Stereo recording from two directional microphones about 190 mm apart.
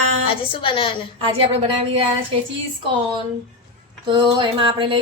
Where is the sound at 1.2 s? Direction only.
30° right (ahead or behind).